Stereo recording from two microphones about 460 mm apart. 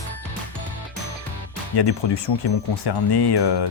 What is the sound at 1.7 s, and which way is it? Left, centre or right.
Speech, left.